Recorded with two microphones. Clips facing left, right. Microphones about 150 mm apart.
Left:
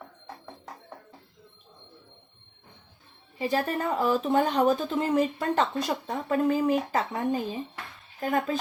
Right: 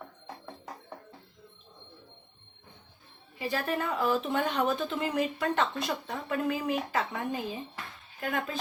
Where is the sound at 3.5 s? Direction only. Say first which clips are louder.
Left 3 dB; 40° left (ahead or behind).